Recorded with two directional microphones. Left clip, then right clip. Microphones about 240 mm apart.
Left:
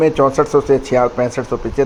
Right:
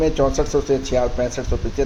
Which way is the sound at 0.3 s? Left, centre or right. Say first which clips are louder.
Left 6 dB; left.